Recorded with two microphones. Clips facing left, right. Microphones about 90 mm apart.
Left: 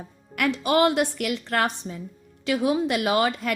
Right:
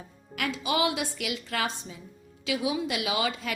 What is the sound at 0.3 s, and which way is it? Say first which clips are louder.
Speech: left 7 dB; 60° left (ahead or behind).